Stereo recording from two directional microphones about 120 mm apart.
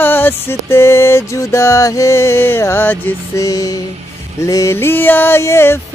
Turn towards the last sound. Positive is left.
turn(degrees=20)  # may be behind; listen again after turning